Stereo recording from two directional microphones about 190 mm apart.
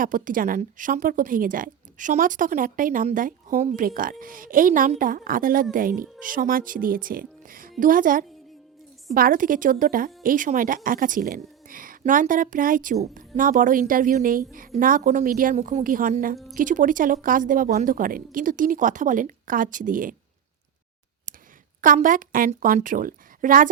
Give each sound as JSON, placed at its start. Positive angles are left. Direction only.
{"t": 0.0, "sound": "a woman's voice", "side_deg": -45}
{"t": 21.8, "sound": "a woman's voice", "side_deg": -45}